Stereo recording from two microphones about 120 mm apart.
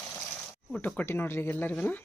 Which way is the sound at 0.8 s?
15° left (ahead or behind).